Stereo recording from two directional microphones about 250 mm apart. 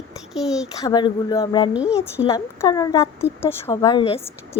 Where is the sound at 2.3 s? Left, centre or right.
Centre.